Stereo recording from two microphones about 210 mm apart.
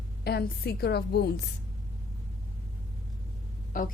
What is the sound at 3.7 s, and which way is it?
Speech, 40° left (ahead or behind).